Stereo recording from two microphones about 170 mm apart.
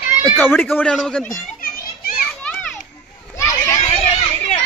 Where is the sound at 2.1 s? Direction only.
10° left (ahead or behind).